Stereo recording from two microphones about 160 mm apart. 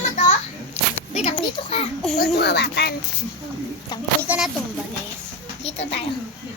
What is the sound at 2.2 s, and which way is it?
Speech, 90° left.